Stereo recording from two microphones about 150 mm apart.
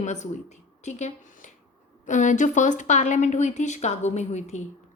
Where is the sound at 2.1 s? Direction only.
55° left (ahead or behind).